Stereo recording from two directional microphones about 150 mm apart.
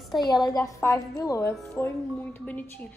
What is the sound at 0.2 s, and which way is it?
A woman's voice, 30° left (ahead or behind).